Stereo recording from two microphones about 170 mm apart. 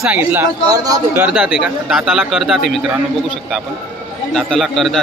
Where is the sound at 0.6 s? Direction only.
20° right (ahead or behind); by 2.8 s centre (ahead or behind).